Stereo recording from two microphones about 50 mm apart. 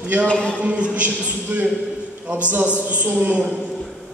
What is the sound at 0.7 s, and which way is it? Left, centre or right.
A man's voice, right.